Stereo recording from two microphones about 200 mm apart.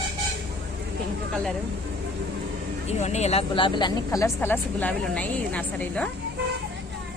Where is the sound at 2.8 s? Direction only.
35° left (ahead or behind); by 6.1 s 5° left (ahead or behind).